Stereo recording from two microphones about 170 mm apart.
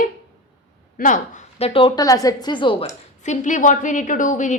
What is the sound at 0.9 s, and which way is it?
A woman's voice, 50° left (ahead or behind).